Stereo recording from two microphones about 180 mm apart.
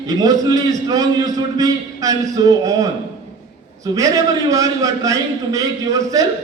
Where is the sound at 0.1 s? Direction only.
20° right (ahead or behind).